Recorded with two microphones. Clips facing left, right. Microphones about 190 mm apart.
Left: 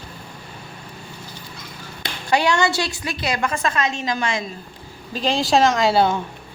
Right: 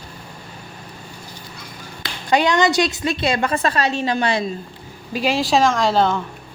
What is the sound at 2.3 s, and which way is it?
A woman's voice, 20° right (ahead or behind).